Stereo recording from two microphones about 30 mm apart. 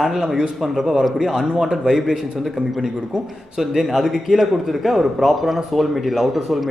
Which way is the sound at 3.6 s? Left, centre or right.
Centre.